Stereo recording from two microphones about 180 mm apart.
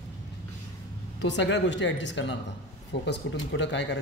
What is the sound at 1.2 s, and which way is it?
Speech, 80° left.